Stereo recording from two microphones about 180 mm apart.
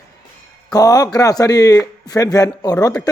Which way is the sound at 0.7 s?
20° left (ahead or behind).